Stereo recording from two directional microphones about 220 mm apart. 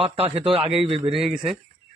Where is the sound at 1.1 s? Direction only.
Centre (ahead or behind).